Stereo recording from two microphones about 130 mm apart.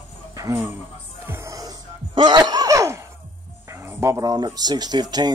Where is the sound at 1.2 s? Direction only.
20° right (ahead or behind).